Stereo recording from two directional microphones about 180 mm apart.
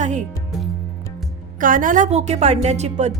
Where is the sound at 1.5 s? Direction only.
50° right (ahead or behind).